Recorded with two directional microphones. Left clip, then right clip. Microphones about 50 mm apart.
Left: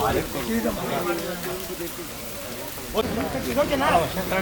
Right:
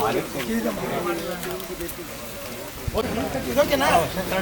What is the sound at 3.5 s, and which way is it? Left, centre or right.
Speech, right.